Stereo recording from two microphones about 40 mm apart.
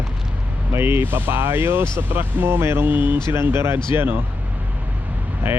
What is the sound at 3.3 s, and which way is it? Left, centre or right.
Speech, right.